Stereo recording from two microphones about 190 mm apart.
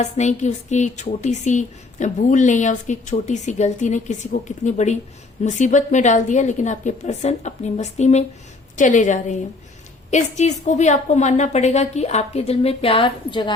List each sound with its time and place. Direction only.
0.0 s a woman's voice: 40° left (ahead or behind)